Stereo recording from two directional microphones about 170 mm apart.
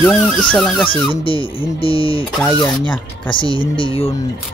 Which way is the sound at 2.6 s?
10° left (ahead or behind).